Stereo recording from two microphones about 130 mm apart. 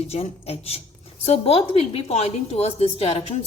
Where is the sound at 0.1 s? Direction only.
50° left (ahead or behind).